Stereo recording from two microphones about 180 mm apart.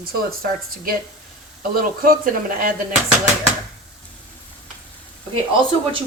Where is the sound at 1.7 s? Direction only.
50° right (ahead or behind).